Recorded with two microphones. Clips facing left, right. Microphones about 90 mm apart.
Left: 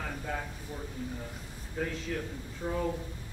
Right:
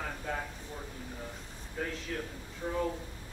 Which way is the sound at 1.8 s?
5° left (ahead or behind).